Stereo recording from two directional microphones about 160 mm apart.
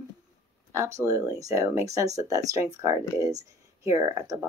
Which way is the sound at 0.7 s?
20° right (ahead or behind).